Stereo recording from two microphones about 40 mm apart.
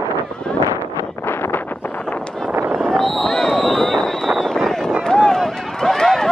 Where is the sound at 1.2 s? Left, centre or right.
Left.